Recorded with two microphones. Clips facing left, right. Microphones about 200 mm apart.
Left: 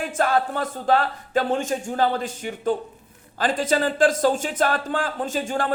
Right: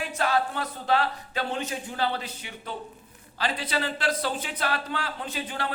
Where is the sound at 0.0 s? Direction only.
50° left (ahead or behind).